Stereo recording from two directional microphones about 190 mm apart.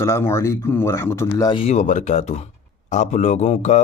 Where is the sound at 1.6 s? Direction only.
40° left (ahead or behind).